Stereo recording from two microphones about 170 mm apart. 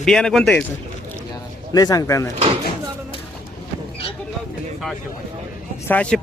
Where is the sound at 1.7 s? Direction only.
20° left (ahead or behind).